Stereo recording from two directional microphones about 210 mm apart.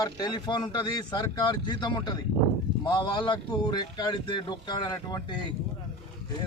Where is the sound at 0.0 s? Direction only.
20° left (ahead or behind).